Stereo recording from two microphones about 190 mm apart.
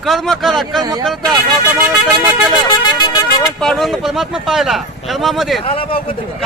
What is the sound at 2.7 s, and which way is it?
Speech, 25° left (ahead or behind).